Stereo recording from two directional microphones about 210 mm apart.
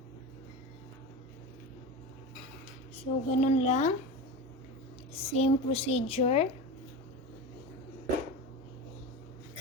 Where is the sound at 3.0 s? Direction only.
30° left (ahead or behind).